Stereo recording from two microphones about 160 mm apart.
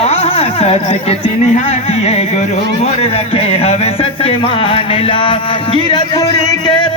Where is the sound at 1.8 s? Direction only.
40° left (ahead or behind).